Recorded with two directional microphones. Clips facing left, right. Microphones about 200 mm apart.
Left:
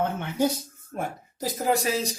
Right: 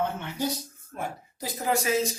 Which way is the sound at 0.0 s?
50° left (ahead or behind).